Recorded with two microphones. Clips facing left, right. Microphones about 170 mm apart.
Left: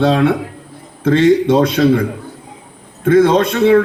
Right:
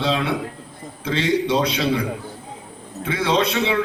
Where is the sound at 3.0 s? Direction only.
50° left (ahead or behind).